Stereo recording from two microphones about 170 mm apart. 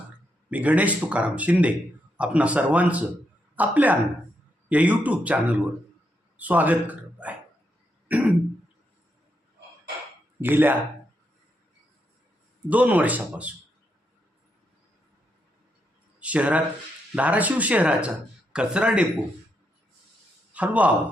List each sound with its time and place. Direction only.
0.5 s speech: 10° right (ahead or behind)
8.0 s throat clearing: 10° right (ahead or behind)
10.4 s speech: 10° right (ahead or behind)
12.6 s speech: 10° right (ahead or behind)
16.2 s speech: 10° right (ahead or behind)
20.5 s a man's voice: 10° right (ahead or behind)